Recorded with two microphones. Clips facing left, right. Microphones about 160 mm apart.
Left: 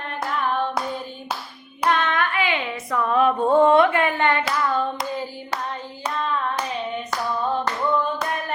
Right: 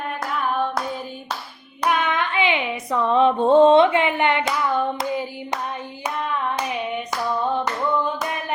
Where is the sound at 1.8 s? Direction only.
10° right (ahead or behind).